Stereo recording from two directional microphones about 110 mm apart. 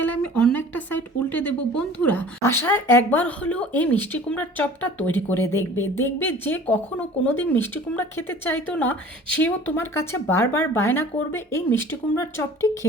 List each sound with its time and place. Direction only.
0.0 s speech: 15° left (ahead or behind)